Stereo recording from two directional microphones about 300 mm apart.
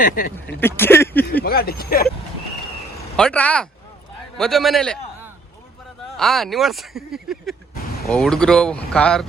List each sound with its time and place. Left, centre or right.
0.0 s speech: left
0.3 s speech: centre
1.5 s speech: left
3.2 s a man's voice: centre